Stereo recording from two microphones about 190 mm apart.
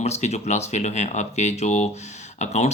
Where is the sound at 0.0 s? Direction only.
35° left (ahead or behind).